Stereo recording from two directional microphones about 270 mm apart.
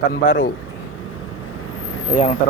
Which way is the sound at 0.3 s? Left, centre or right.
Left.